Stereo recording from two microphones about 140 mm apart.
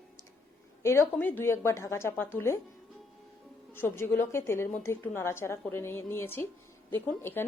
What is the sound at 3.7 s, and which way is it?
A woman's voice, 15° left (ahead or behind).